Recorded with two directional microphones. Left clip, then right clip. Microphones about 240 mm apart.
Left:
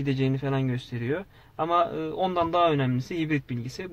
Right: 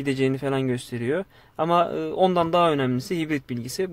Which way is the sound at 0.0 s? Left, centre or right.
Right.